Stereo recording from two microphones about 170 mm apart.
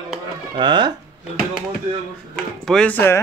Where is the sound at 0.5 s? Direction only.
25° right (ahead or behind).